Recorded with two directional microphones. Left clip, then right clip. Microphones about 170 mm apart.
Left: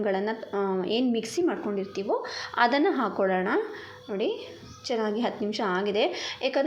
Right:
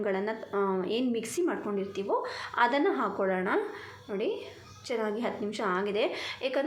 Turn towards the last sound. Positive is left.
turn(degrees=15)  # may be behind; listen again after turning